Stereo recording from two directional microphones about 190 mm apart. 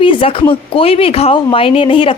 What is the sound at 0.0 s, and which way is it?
A woman's voice, 25° left (ahead or behind).